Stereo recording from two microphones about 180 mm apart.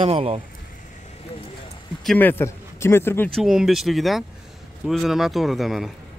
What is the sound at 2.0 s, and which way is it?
Speech, 10° left (ahead or behind).